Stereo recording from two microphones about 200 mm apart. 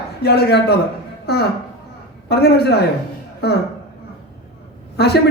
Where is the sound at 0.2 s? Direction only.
55° left (ahead or behind).